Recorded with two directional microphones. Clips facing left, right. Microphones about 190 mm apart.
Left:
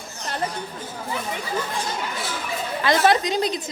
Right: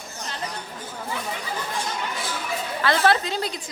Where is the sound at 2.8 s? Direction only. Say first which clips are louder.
Left 2 dB; 15° left (ahead or behind).